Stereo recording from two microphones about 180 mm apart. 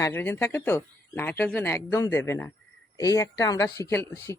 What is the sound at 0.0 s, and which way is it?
Speech, 15° left (ahead or behind).